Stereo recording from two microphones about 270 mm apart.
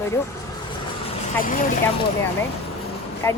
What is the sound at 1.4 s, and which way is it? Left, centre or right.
Speech, left.